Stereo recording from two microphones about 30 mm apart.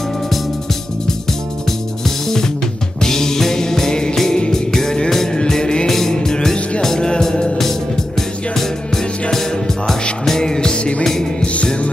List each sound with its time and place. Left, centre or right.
1.7 s music: centre
6.1 s music: left
8.2 s music: centre
10.8 s music: left